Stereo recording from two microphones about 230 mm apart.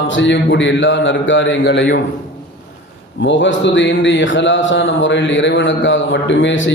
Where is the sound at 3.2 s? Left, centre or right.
Left.